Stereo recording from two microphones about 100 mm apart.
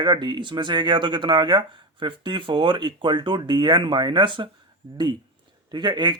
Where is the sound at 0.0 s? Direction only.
45° right (ahead or behind).